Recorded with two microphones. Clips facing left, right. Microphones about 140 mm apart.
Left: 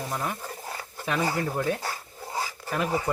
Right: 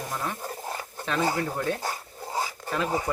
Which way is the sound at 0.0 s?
5° left (ahead or behind).